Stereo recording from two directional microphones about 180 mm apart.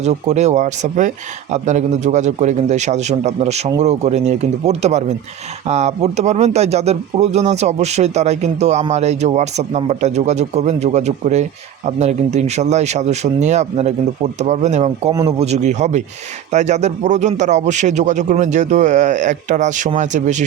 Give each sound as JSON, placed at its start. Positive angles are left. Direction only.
{"t": 0.0, "sound": "speech", "side_deg": -40}